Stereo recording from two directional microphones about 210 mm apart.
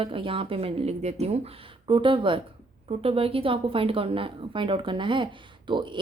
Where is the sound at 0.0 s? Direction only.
25° right (ahead or behind).